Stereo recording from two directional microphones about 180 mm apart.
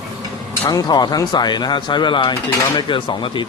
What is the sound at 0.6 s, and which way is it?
A man's voice, 20° left (ahead or behind).